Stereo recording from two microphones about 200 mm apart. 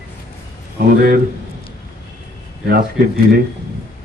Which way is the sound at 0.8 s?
50° right (ahead or behind).